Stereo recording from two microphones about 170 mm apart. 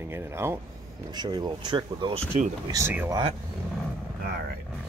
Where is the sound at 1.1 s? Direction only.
25° right (ahead or behind).